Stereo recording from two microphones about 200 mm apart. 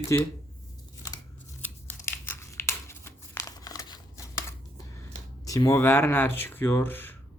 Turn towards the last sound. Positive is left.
turn(degrees=10)  # may be behind; listen again after turning